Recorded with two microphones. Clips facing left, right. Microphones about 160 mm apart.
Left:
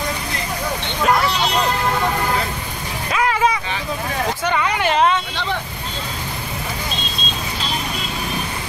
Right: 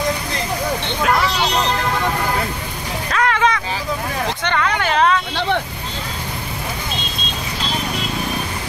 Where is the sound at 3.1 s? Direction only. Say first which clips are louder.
Even; 10° left (ahead or behind).